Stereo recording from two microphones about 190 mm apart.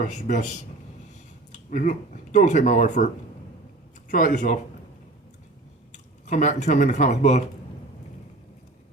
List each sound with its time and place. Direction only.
0.0 s speech: 40° left (ahead or behind)
1.5 s speech: 40° left (ahead or behind)
4.1 s speech: 45° left (ahead or behind)
5.9 s speech: 40° left (ahead or behind)